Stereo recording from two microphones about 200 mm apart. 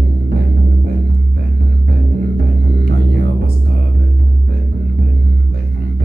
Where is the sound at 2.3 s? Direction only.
55° right (ahead or behind).